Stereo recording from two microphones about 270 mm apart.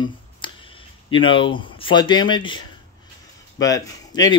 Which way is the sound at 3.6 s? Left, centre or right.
Centre.